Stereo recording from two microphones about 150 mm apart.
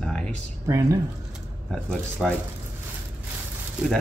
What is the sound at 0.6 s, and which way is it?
Speech, 20° right (ahead or behind).